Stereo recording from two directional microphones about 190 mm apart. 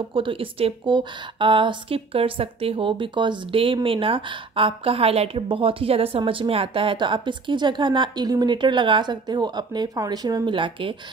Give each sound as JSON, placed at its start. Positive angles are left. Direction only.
{"t": 0.1, "sound": "a woman's voice", "side_deg": -25}